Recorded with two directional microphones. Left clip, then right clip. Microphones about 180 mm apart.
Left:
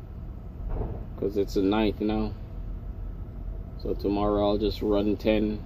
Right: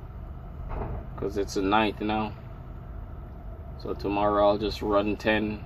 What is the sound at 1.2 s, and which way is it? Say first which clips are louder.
Speech: left 3 dB; 5° left (ahead or behind).